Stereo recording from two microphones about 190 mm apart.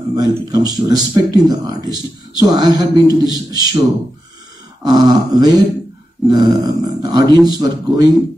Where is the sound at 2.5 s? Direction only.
20° right (ahead or behind).